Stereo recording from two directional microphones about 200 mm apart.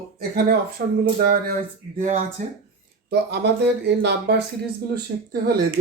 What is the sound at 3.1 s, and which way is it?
Speech, 55° right (ahead or behind).